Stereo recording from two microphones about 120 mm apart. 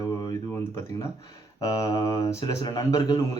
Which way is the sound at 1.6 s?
30° left (ahead or behind).